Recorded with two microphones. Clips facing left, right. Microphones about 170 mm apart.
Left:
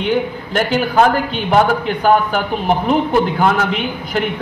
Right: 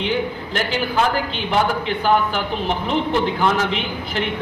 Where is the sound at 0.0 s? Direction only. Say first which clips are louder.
Left 4 dB; 50° left (ahead or behind).